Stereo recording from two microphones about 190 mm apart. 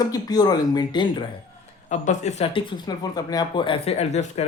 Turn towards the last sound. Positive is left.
turn(degrees=35)  # may be behind; listen again after turning